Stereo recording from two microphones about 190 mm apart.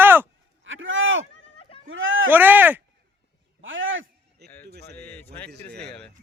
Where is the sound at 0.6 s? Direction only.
85° right.